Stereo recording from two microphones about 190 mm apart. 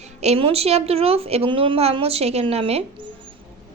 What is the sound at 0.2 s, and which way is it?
A woman's voice, 30° right (ahead or behind).